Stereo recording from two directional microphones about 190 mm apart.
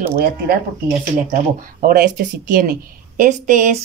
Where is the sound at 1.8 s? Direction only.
50° right (ahead or behind).